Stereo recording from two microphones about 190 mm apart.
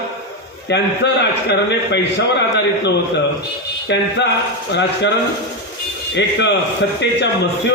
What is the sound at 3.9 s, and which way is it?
Speech, 65° left (ahead or behind).